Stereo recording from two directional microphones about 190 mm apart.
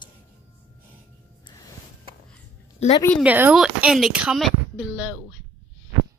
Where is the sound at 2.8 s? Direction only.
35° left (ahead or behind).